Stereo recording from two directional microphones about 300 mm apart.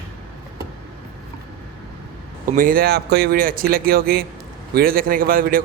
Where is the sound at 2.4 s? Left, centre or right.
Right.